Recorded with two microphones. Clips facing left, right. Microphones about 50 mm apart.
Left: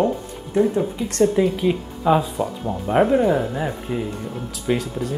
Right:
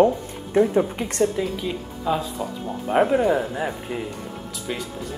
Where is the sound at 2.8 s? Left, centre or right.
Centre.